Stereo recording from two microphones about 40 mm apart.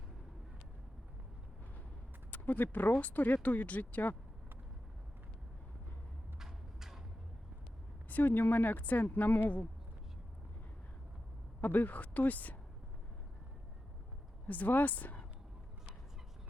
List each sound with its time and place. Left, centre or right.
2.3 s a woman's voice: left
6.4 s a sound: centre
8.1 s a woman's voice: left
11.6 s a woman's voice: left
14.4 s a woman's voice: left